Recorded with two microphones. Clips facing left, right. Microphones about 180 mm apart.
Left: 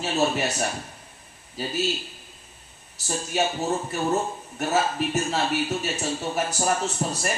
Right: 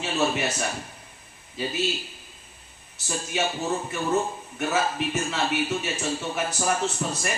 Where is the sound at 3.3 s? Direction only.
40° left (ahead or behind).